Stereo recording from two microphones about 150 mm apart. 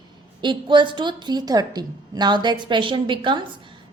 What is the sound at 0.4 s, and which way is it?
A woman's voice, 30° right (ahead or behind).